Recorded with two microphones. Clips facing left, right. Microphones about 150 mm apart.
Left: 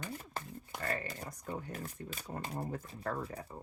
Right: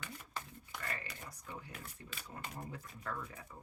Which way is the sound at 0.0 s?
45° left (ahead or behind).